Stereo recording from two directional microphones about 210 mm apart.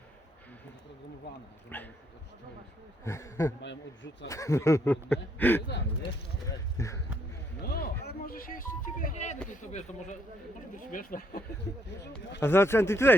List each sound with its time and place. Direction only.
1.3 s speech: 55° left (ahead or behind)
1.7 s speech: 10° left (ahead or behind)
3.0 s speech: 15° left (ahead or behind)
3.6 s speech: 60° left (ahead or behind)
4.3 s speech: 15° left (ahead or behind)
6.7 s a sound: 15° left (ahead or behind)
7.6 s a sound: 50° left (ahead or behind); by 9.4 s 35° left (ahead or behind)
9.6 s speech: 35° left (ahead or behind)
12.4 s speech: 10° left (ahead or behind)